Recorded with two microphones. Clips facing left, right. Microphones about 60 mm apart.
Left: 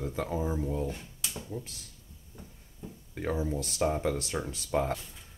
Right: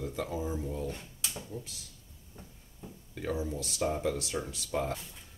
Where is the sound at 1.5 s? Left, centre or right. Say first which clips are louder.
Left 3 dB; left.